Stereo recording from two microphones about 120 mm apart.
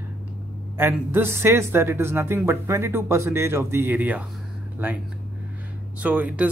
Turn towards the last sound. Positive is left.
turn(degrees=-10)  # may be behind; listen again after turning